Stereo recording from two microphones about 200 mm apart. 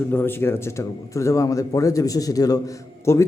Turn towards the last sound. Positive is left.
turn(degrees=15)  # may be behind; listen again after turning